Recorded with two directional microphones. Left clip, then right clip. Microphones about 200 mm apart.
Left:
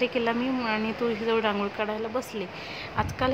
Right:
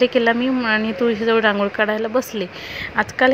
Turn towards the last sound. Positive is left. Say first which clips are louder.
# right 10 dB
turn(degrees=-20)  # may be behind; listen again after turning